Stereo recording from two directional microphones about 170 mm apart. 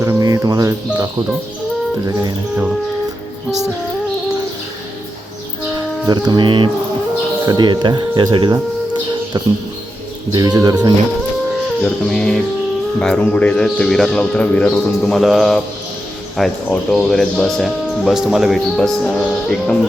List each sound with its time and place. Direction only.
0.0 s cricket: 20° right (ahead or behind)
6.1 s speech: 25° right (ahead or behind)
11.8 s speech: 5° left (ahead or behind)